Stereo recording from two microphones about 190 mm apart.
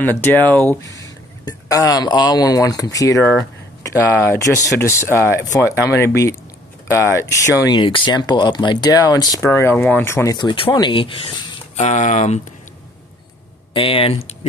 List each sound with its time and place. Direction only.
0.0 s speech: 10° left (ahead or behind); by 12.4 s 40° left (ahead or behind)
13.7 s speech: 30° left (ahead or behind)